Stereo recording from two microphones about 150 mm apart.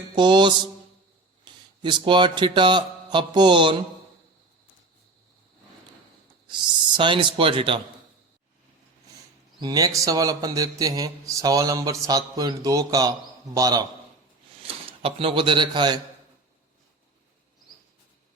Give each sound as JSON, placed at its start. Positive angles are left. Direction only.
{"t": 0.2, "sound": "speech", "side_deg": -30}
{"t": 6.5, "sound": "speech", "side_deg": -30}
{"t": 9.6, "sound": "speech", "side_deg": -25}
{"t": 14.6, "sound": "speech", "side_deg": -40}